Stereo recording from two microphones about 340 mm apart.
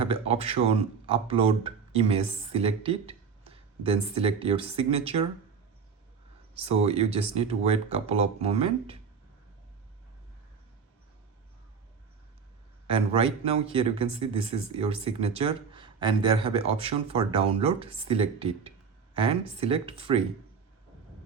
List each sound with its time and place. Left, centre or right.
0.0 s speech: centre
6.6 s speech: centre
12.9 s speech: centre